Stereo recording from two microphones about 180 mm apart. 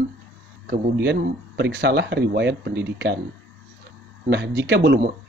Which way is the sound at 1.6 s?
70° right (ahead or behind).